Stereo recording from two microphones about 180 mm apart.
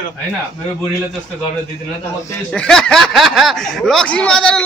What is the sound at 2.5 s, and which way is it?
Speech, 5° left (ahead or behind).